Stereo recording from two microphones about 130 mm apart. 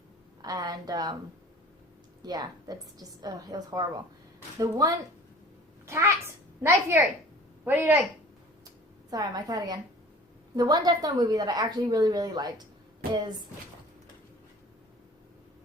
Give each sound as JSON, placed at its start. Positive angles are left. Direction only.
{"t": 0.4, "sound": "a woman's voice", "side_deg": -30}
{"t": 2.2, "sound": "a woman's voice", "side_deg": -30}
{"t": 9.0, "sound": "a woman's voice", "side_deg": -30}